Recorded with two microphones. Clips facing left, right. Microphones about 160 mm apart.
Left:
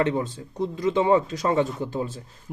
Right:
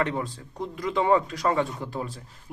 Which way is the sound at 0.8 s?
20° left (ahead or behind).